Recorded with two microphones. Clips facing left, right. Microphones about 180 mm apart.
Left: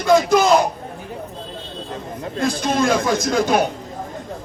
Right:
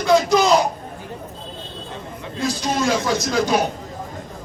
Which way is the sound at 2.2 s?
55° left (ahead or behind).